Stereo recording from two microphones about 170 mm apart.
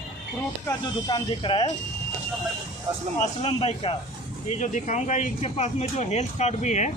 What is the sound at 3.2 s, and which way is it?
Speech, 35° left (ahead or behind).